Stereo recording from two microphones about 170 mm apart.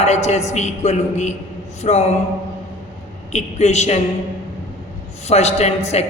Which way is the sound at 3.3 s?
40° left (ahead or behind).